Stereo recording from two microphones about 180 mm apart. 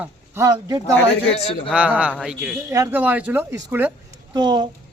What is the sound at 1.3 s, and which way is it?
Speech, 35° left (ahead or behind).